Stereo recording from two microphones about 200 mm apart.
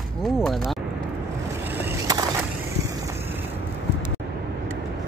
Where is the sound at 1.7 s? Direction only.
15° right (ahead or behind).